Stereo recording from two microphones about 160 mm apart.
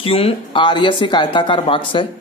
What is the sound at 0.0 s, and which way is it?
A man's voice, 35° left (ahead or behind).